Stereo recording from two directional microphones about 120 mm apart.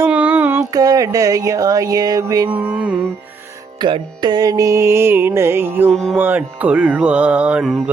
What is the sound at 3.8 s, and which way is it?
Music, 35° right (ahead or behind).